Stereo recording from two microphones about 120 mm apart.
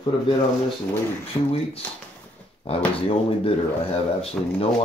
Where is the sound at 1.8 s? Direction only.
15° left (ahead or behind).